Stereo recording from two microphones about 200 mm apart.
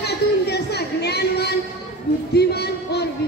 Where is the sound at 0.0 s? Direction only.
55° left (ahead or behind).